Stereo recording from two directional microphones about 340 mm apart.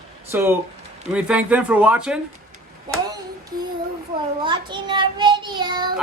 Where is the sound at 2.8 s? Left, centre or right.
Centre.